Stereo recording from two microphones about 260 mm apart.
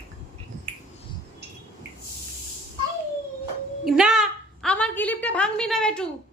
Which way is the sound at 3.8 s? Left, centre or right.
Centre.